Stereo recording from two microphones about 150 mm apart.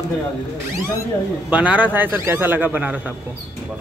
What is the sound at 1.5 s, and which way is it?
Speech, 10° right (ahead or behind).